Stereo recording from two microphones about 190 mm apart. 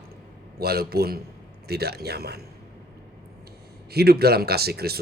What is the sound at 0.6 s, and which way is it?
Speech, 55° right (ahead or behind).